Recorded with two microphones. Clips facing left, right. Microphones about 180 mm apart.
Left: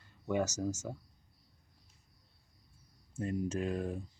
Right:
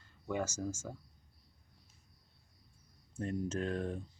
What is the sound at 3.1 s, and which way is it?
Speech, 5° left (ahead or behind).